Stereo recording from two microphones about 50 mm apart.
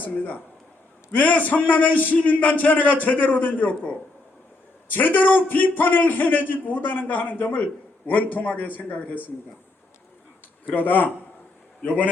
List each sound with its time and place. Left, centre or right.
1.1 s a man's voice: left
10.8 s a man's voice: left